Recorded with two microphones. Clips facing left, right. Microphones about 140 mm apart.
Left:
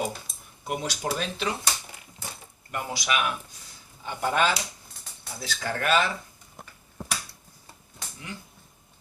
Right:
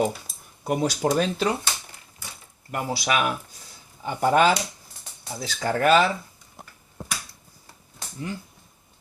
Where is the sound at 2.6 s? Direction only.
35° right (ahead or behind).